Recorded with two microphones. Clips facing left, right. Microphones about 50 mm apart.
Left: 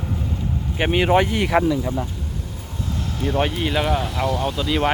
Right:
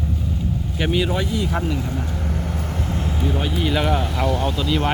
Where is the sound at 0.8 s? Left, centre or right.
Left.